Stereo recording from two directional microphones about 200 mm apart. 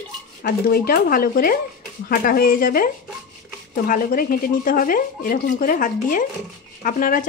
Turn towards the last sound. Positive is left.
turn(degrees=45)  # may be behind; listen again after turning